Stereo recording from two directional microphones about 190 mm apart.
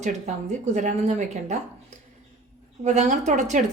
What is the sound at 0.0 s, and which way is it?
A woman's voice, 35° right (ahead or behind).